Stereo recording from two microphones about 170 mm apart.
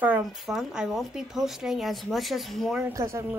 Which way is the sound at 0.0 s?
5° right (ahead or behind).